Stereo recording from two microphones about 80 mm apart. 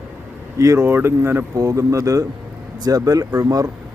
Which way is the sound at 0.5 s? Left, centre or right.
Right.